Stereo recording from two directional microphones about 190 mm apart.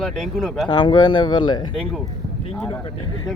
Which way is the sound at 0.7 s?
25° left (ahead or behind).